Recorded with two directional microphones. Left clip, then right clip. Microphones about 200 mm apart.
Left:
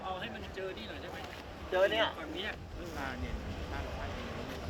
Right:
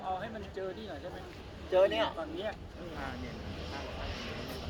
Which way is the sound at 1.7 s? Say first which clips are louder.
Right 2 dB; 65° right (ahead or behind).